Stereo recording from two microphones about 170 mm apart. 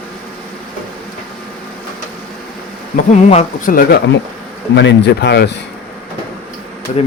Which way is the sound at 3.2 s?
40° left (ahead or behind).